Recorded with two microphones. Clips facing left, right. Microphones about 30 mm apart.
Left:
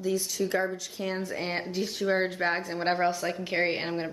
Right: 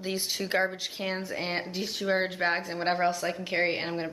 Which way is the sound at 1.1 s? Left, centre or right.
Centre.